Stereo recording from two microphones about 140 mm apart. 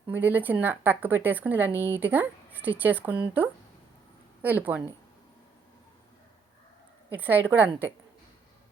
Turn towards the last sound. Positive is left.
turn(degrees=-15)  # may be behind; listen again after turning